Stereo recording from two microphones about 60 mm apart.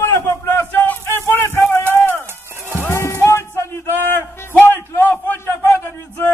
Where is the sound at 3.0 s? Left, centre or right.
Left.